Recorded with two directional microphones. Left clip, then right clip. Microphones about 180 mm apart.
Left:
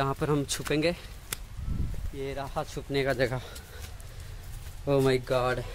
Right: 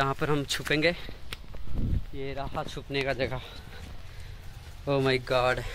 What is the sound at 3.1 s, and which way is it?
Speech, 40° left (ahead or behind).